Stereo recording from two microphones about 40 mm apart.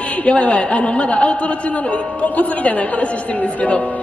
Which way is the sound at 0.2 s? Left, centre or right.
Left.